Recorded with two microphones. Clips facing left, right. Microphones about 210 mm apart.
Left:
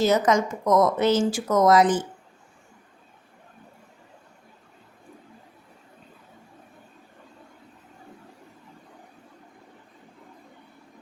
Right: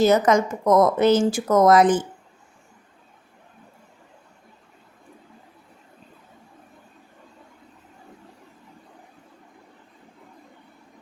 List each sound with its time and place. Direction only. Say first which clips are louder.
0.0 s speech: right 3 dB; 55° right (ahead or behind)